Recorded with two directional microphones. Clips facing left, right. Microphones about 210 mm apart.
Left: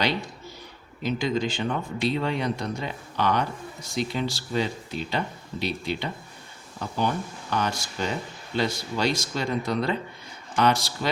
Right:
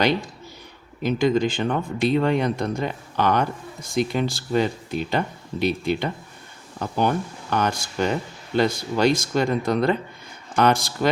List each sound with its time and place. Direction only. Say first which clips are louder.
1.0 s speech: right 6 dB; 55° right (ahead or behind)